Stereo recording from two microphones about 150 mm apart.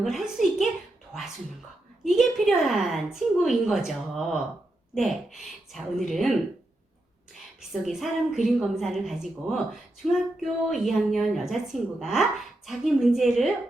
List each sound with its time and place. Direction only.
0.0 s a child's voice: centre (ahead or behind)
7.7 s a woman's voice: centre (ahead or behind)